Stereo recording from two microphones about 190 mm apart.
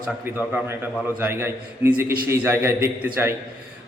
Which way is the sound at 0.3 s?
10° right (ahead or behind).